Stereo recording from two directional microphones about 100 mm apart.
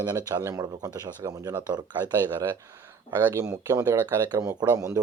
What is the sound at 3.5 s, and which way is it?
Speech, 30° right (ahead or behind).